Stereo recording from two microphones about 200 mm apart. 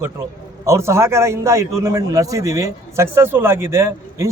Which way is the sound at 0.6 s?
15° right (ahead or behind).